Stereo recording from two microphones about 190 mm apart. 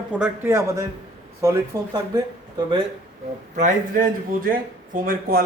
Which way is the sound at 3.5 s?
45° right (ahead or behind).